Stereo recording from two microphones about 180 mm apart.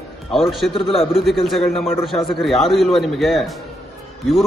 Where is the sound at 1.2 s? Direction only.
Centre (ahead or behind).